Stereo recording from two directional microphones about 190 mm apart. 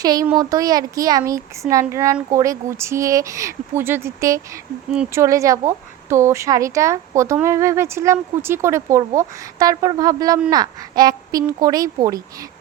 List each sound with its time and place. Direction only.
0.0 s a woman's voice: 20° right (ahead or behind)